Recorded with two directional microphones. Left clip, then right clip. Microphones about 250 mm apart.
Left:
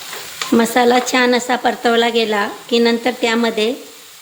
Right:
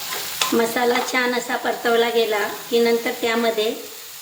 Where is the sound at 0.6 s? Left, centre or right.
Left.